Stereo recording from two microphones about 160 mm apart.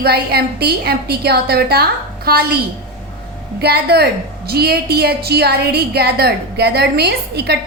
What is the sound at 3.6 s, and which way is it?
A woman's voice, 80° right.